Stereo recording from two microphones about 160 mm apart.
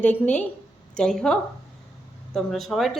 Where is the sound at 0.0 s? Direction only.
10° left (ahead or behind).